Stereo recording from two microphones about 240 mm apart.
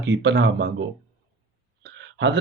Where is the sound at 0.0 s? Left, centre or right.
Right.